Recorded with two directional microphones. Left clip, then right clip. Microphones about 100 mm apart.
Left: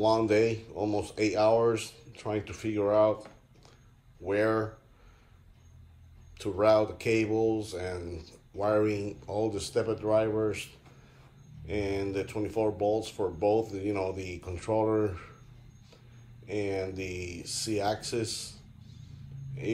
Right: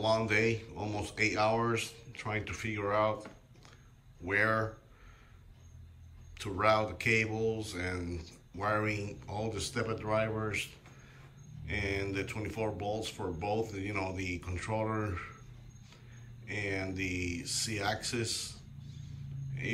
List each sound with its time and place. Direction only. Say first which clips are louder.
0.0 s speech: left 5 dB; 50° left (ahead or behind)
4.3 s speech: left 2 dB; 45° left (ahead or behind)
6.3 s speech: left 5 dB; 50° left (ahead or behind)
16.4 s speech: left 4 dB; 50° left (ahead or behind)